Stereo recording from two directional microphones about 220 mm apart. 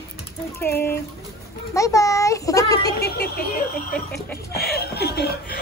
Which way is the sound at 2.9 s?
45° left (ahead or behind).